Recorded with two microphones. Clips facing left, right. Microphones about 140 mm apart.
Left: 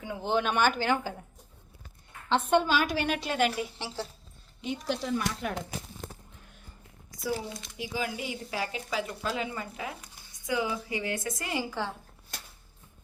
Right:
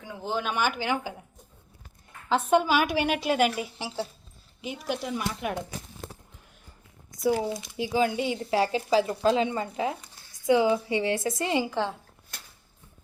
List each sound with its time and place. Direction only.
0.0 s speech: centre (ahead or behind)
2.3 s a woman's voice: 5° right (ahead or behind)
7.8 s a woman's voice: 30° right (ahead or behind)